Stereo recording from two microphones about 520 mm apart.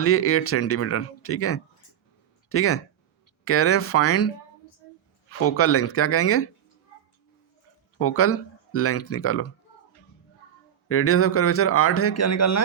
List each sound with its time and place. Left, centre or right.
0.0 s speech: left
5.4 s speech: left
7.9 s speech: left
10.8 s speech: left